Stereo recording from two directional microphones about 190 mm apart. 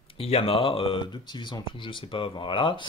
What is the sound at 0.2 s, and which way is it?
Speech, 30° left (ahead or behind).